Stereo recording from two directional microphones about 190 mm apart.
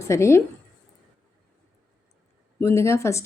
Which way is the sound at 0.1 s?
15° left (ahead or behind).